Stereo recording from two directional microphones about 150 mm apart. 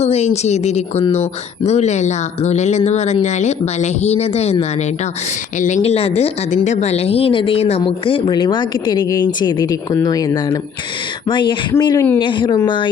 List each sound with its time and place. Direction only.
0.0 s speech: 45° left (ahead or behind)
5.5 s speech: 55° left (ahead or behind); by 12.9 s 30° left (ahead or behind)